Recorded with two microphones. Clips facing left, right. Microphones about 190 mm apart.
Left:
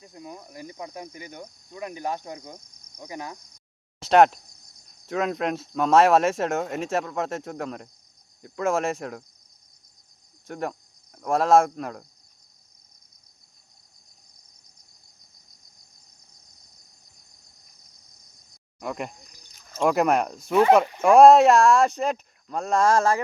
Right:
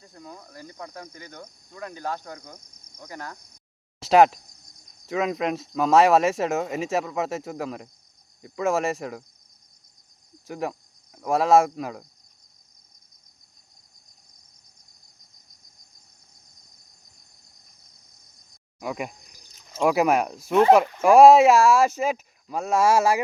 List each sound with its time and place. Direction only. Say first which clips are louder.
0.0 s cricket: left 2 dB; 15° left (ahead or behind)
4.0 s speech: even; centre (ahead or behind)
10.4 s speech: right 1 dB; centre (ahead or behind)
18.8 s speech: right 1 dB; 5° right (ahead or behind)